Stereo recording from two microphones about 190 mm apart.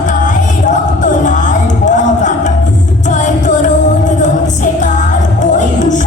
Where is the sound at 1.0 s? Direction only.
40° left (ahead or behind).